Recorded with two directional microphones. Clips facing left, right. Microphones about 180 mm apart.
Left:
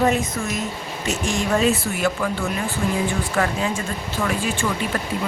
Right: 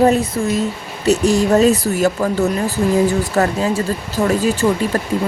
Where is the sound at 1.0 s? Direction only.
40° right (ahead or behind).